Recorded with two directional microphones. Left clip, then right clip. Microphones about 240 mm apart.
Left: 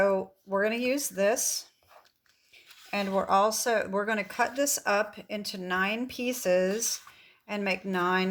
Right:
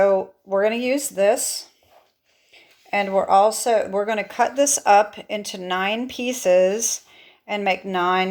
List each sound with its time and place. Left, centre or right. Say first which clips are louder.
0.0 s speech: right 8 dB; left
2.9 s speech: right 9 dB; left